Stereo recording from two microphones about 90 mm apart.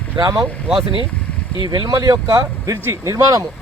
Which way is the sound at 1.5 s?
55° right (ahead or behind).